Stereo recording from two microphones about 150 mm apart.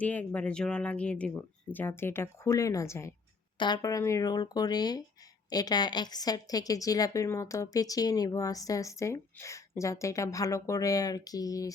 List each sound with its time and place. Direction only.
0.0 s a woman's voice: 10° left (ahead or behind)